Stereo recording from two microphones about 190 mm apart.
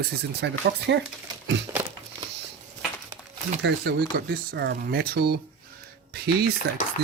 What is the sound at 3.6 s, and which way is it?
Speech, 60° right (ahead or behind).